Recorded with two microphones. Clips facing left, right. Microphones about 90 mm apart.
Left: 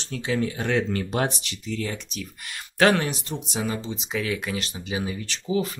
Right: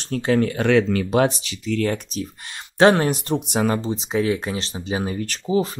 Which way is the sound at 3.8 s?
35° right (ahead or behind).